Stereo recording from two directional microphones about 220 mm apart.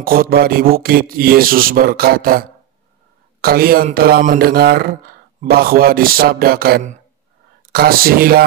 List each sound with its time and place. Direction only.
0.0 s speech: 40° right (ahead or behind)